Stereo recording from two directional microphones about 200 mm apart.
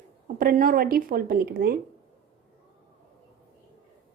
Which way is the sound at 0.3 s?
45° right (ahead or behind).